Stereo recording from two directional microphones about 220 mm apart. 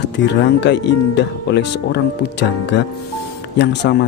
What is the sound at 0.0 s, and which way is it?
Speech, 50° left (ahead or behind).